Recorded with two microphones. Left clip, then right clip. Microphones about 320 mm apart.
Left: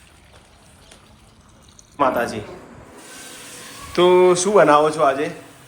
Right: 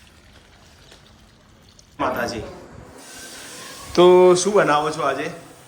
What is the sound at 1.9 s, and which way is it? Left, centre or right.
Speech, centre.